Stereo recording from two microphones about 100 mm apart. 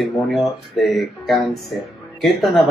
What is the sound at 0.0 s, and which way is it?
Speech, centre (ahead or behind).